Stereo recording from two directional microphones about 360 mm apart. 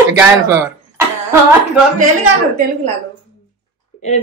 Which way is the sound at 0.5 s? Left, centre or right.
Centre.